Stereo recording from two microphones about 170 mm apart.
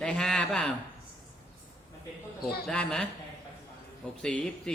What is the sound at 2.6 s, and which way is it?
Speech, 5° left (ahead or behind).